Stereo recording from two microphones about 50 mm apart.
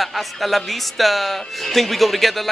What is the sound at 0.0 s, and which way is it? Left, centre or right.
Speech, centre.